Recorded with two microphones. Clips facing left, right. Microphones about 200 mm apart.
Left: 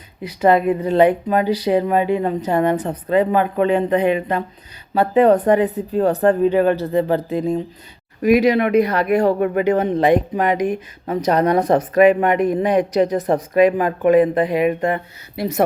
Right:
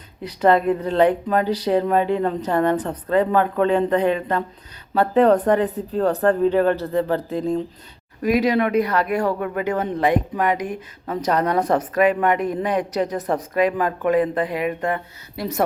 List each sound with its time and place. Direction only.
0.2 s speech: 10° left (ahead or behind)